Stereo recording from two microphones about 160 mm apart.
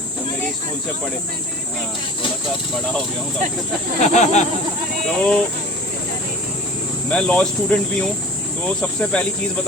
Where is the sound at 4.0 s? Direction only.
45° left (ahead or behind).